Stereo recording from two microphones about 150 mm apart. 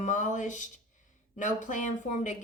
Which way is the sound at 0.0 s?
55° left (ahead or behind).